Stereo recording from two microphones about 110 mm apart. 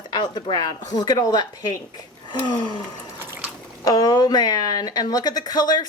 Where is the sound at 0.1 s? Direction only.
40° left (ahead or behind).